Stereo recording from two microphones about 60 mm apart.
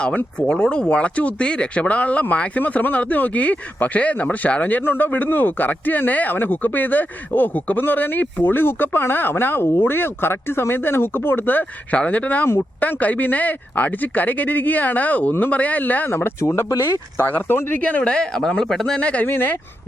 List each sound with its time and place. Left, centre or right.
0.3 s speech: centre
16.0 s speech: left
17.7 s speech: left; by 18.9 s centre
18.9 s speech: left
19.2 s speech: left